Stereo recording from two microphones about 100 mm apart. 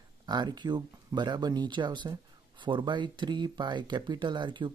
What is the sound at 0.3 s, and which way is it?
Speech, 45° right (ahead or behind).